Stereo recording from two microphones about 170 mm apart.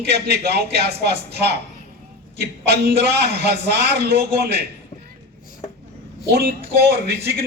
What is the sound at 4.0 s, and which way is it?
Speech, 70° right (ahead or behind).